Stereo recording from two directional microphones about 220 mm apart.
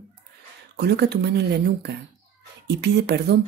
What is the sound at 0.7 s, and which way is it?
Speech, 50° right (ahead or behind).